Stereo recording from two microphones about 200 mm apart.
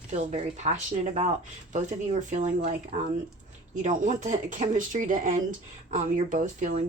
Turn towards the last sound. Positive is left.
turn(degrees=-40)  # may be behind; listen again after turning